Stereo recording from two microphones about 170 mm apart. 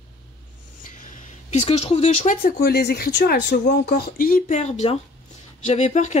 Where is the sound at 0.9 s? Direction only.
50° left (ahead or behind).